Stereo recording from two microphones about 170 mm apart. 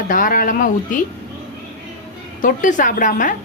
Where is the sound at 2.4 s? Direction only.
50° left (ahead or behind).